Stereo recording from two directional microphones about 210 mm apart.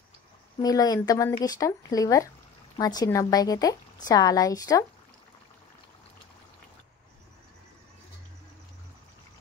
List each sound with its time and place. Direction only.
0.6 s speech: 15° left (ahead or behind)